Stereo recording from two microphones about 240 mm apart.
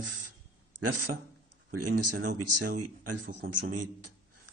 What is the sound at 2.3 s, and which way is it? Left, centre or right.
Speech, right.